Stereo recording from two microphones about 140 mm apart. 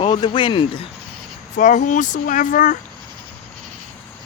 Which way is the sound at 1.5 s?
65° left (ahead or behind).